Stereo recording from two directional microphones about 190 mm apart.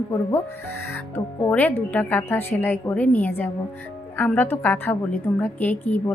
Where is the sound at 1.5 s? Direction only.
10° left (ahead or behind).